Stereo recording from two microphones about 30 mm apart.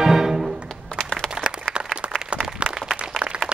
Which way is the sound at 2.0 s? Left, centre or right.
Right.